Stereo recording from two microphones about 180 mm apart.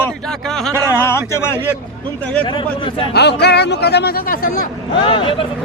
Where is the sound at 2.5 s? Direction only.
25° left (ahead or behind).